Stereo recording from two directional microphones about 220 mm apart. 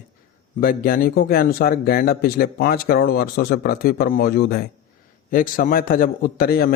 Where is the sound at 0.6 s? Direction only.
40° left (ahead or behind).